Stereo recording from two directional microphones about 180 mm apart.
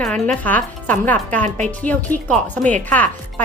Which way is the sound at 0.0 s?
5° left (ahead or behind).